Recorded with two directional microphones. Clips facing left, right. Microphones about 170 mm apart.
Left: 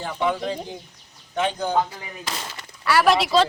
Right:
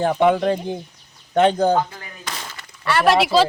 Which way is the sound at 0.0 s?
55° right (ahead or behind).